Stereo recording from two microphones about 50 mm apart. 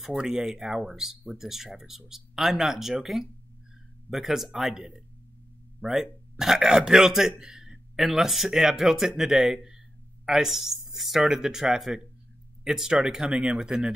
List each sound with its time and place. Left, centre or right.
0.0 s a man's voice: centre
13.3 s speech: right
13.6 s a man's voice: centre